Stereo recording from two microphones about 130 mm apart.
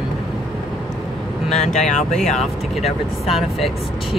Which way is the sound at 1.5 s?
60° left (ahead or behind).